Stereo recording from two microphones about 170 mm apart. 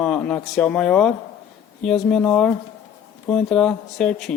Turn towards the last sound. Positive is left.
turn(degrees=0)  # may be behind; listen again after turning